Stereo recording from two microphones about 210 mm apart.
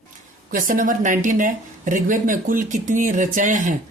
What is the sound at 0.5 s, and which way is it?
Speech, 40° right (ahead or behind).